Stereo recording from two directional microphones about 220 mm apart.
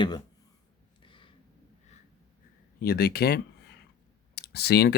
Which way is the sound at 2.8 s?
45° left (ahead or behind).